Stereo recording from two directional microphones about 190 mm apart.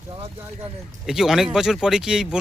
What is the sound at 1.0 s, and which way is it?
Speech, centre (ahead or behind).